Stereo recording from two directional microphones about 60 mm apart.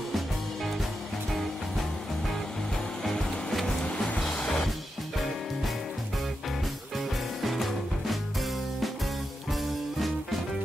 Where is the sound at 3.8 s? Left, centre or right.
Left.